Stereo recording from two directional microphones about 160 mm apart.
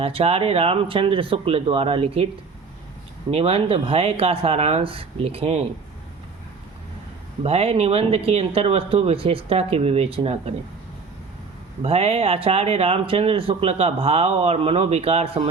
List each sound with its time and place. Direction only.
0.0 s speech: 35° right (ahead or behind)
3.3 s speech: 35° right (ahead or behind)
7.4 s speech: 40° right (ahead or behind)
11.8 s speech: 35° right (ahead or behind)